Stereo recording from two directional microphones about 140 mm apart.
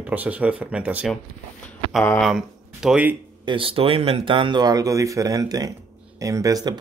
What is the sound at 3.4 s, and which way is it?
Speech, 40° right (ahead or behind).